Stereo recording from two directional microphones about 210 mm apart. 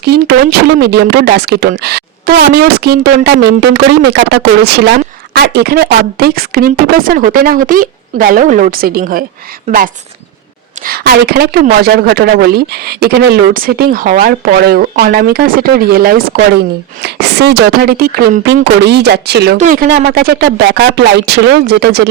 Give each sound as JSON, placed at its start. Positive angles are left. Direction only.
{"t": 0.0, "sound": "speech", "side_deg": -50}
{"t": 19.5, "sound": "speech", "side_deg": -40}